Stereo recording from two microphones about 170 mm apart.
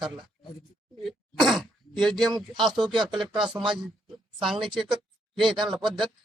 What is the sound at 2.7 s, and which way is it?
Speech, 25° right (ahead or behind).